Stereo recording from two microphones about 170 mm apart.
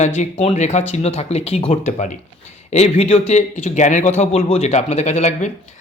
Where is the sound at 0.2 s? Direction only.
40° left (ahead or behind).